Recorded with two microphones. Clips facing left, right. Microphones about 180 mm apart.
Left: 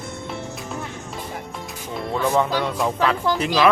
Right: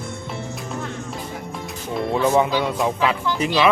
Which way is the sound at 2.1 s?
15° right (ahead or behind).